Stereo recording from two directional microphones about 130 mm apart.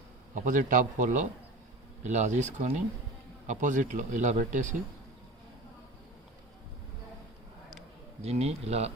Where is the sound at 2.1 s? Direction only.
65° right (ahead or behind).